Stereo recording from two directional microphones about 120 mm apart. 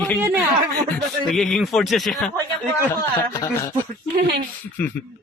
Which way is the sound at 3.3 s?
30° left (ahead or behind).